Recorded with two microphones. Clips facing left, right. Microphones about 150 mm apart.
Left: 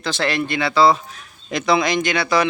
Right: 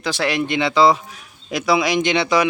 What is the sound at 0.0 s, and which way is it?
Speech, 10° right (ahead or behind).